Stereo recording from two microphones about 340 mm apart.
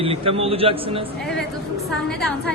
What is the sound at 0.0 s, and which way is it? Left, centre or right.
A man's voice, centre.